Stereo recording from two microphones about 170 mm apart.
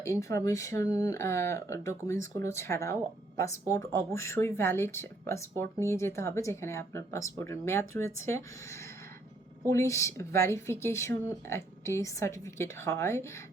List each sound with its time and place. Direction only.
0.0 s speech: 20° left (ahead or behind)